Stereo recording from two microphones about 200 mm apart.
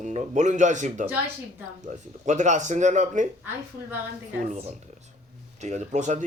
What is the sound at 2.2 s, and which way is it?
Speech, 35° right (ahead or behind).